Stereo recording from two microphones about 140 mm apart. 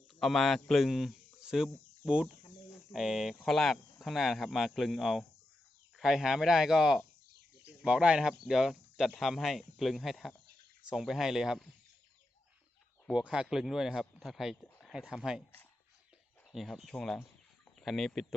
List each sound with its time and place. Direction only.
0.2 s speech: centre (ahead or behind)
13.1 s speech: 5° right (ahead or behind)
16.5 s speech: centre (ahead or behind)